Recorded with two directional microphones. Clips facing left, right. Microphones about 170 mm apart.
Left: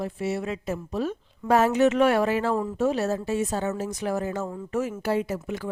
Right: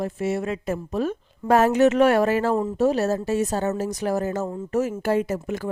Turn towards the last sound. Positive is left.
turn(degrees=-45)  # may be behind; listen again after turning